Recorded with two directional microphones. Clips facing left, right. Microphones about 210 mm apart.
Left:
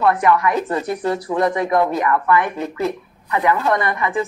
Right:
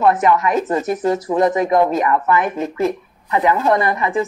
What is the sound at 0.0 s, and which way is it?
A woman's voice, 20° right (ahead or behind).